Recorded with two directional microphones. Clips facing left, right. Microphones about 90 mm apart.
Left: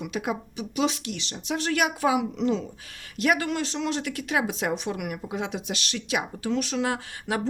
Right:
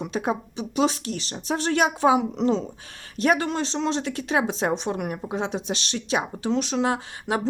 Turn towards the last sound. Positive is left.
turn(degrees=-25)  # may be behind; listen again after turning